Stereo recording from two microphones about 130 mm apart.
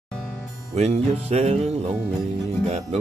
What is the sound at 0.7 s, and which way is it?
Music, 55° right (ahead or behind).